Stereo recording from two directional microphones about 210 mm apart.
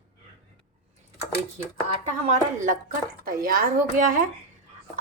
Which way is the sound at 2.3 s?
35° right (ahead or behind).